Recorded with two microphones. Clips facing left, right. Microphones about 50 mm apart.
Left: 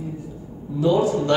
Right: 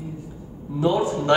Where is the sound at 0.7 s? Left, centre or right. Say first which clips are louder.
Left 2 dB; right.